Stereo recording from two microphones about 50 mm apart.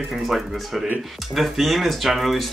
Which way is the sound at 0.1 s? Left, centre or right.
Centre.